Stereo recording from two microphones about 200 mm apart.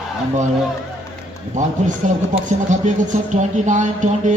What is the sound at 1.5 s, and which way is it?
Speech, 40° right (ahead or behind).